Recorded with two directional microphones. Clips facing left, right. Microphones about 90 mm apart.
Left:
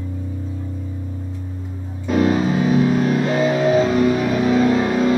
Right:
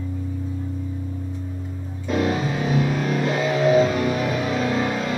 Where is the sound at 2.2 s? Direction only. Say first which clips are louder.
Left 6 dB; 30° left (ahead or behind).